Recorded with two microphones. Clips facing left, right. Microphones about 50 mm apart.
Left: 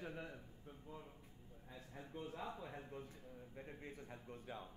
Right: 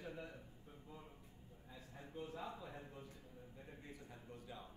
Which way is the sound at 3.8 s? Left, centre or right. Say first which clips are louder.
Left 3 dB; left.